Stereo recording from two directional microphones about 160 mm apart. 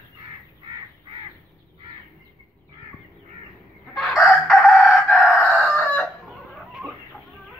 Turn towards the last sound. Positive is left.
turn(degrees=-5)  # may be behind; listen again after turning